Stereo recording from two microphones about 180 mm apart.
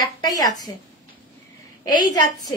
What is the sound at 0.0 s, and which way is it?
Speech, 20° left (ahead or behind).